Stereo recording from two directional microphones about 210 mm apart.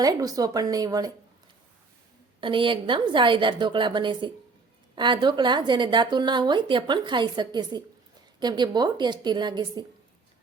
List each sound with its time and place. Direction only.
0.0 s speech: 15° right (ahead or behind)
2.4 s a woman's voice: 25° right (ahead or behind)